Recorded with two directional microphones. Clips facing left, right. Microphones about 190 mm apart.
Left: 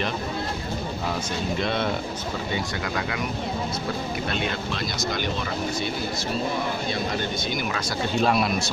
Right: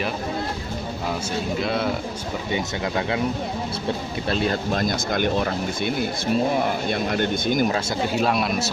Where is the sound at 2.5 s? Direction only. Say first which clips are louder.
Right 3 dB; 25° right (ahead or behind).